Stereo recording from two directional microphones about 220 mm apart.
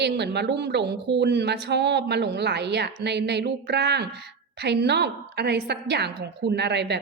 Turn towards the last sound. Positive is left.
turn(degrees=-50)  # may be behind; listen again after turning